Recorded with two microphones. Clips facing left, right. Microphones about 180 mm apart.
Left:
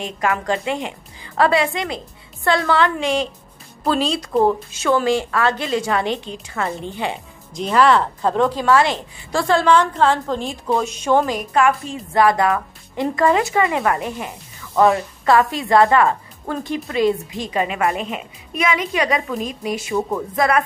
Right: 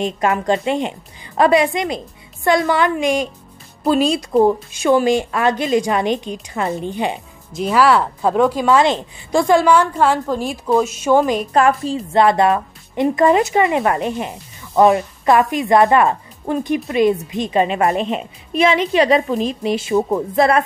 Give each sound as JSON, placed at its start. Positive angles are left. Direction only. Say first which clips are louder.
{"t": 0.0, "sound": "a woman's voice", "louder": "right 4 dB", "side_deg": -25}
{"t": 7.5, "sound": "a woman's voice", "louder": "right 1 dB", "side_deg": -5}
{"t": 11.5, "sound": "speech", "louder": "right 1 dB", "side_deg": -35}